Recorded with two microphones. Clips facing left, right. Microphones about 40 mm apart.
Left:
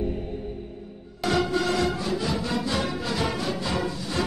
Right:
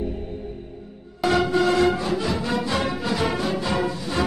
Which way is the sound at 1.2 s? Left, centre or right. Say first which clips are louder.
Right 4 dB; right.